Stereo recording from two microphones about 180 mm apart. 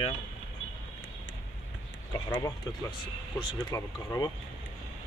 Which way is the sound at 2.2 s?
15° left (ahead or behind).